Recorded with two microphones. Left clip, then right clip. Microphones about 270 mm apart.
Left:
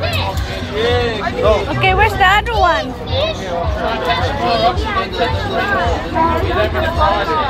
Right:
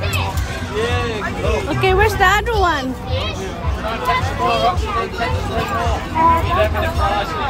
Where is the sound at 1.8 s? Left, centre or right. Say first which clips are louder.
Left 2 dB; centre.